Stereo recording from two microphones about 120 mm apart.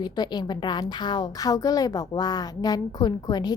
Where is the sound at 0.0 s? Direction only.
35° left (ahead or behind).